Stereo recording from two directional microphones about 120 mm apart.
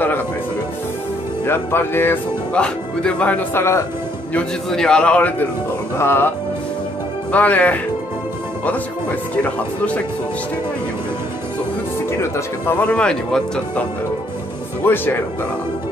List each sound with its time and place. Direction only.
1.4 s speech: 20° left (ahead or behind)
4.3 s speech: 5° left (ahead or behind)
7.3 s speech: 15° left (ahead or behind)
12.1 s speech: 20° left (ahead or behind); by 13.8 s 5° left (ahead or behind)
14.9 s speech: 15° left (ahead or behind)